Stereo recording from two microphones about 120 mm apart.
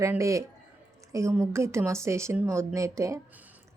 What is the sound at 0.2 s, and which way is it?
A woman's voice, 25° right (ahead or behind).